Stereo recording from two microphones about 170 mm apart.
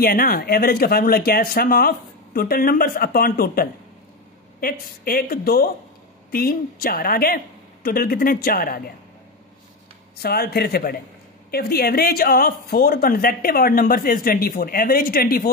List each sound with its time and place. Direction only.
0.0 s a woman's voice: 60° left (ahead or behind)
10.1 s a woman's voice: 65° left (ahead or behind)